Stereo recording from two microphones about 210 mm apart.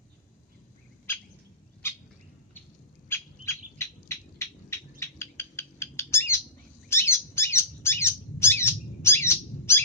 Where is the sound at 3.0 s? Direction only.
10° left (ahead or behind).